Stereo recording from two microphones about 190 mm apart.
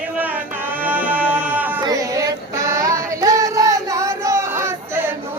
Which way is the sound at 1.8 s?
20° right (ahead or behind).